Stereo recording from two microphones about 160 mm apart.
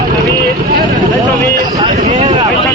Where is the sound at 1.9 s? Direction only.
50° right (ahead or behind).